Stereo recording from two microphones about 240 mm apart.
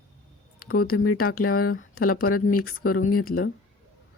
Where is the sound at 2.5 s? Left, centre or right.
Left.